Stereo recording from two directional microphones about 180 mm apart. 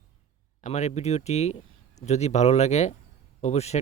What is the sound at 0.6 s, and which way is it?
Speech, 40° left (ahead or behind).